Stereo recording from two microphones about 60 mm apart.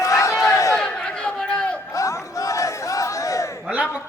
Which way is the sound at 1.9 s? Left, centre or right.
Left.